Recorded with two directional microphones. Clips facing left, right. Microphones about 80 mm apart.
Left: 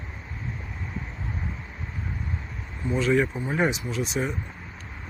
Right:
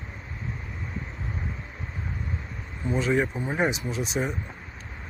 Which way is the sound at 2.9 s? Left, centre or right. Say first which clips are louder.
Left 2 dB; right.